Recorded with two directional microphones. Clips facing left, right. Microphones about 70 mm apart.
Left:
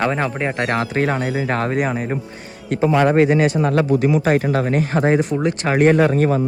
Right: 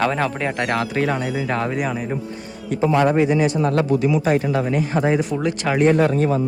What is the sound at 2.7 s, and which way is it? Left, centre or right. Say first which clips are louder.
A man's voice: left 2 dB; left.